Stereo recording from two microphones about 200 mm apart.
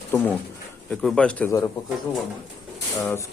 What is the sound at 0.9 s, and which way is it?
Speech, 5° left (ahead or behind).